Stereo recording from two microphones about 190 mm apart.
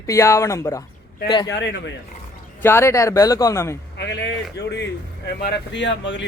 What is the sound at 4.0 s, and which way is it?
Speech, 65° left (ahead or behind).